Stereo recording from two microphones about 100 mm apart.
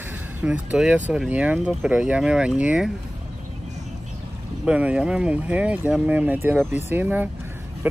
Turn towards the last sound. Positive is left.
turn(degrees=-15)  # may be behind; listen again after turning